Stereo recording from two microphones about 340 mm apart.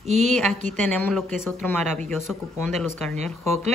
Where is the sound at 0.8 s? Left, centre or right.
Centre.